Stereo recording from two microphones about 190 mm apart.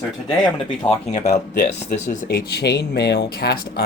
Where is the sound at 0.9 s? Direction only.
35° left (ahead or behind).